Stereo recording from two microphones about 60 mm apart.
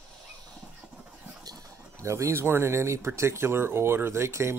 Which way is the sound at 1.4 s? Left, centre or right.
Right.